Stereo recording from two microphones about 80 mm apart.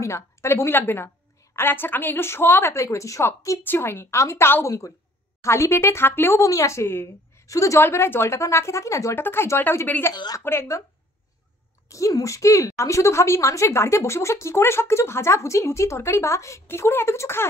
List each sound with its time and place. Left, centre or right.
0.0 s a woman's voice: left
6.4 s a woman's voice: left
9.2 s a woman's voice: left
11.9 s a woman's voice: left